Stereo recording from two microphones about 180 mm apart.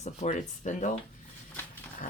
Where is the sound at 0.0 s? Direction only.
40° left (ahead or behind).